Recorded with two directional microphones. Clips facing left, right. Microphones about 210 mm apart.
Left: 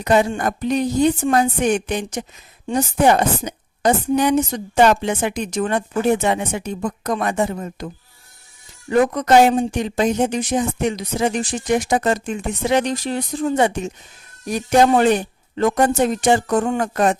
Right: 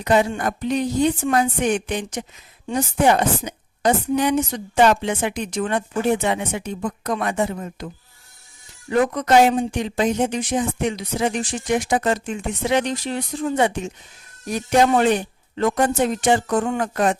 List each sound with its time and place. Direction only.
0.0 s a woman's voice: 45° left (ahead or behind)
8.9 s speech: 40° left (ahead or behind)
14.8 s a woman's voice: 45° left (ahead or behind)